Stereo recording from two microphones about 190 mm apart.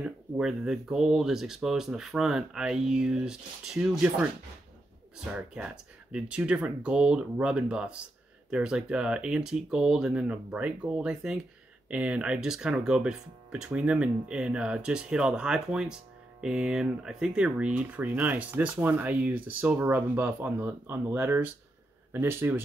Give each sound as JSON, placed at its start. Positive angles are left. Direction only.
{"t": 0.0, "sound": "speech", "side_deg": -5}
{"t": 5.3, "sound": "speech", "side_deg": -5}